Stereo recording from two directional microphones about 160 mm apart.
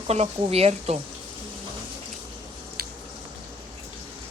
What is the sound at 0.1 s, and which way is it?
Speech, 40° right (ahead or behind).